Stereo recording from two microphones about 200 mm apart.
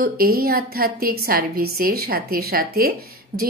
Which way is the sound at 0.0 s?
45° right (ahead or behind).